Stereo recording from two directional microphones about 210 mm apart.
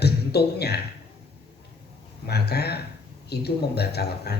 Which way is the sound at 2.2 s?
50° left (ahead or behind).